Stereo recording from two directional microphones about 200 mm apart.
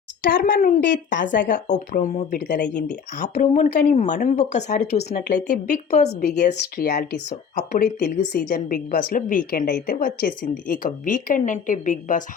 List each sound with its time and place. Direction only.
0.2 s a woman's voice: 50° left (ahead or behind)
2.3 s a woman's voice: 50° left (ahead or behind)
2.6 s a woman's voice: 40° left (ahead or behind)
6.7 s a woman's voice: 55° left (ahead or behind)
7.3 s a woman's voice: 40° left (ahead or behind)
8.1 s a woman's voice: 40° left (ahead or behind)